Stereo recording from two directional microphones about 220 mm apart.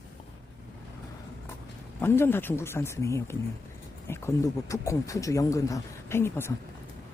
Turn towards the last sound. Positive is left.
turn(degrees=10)  # may be behind; listen again after turning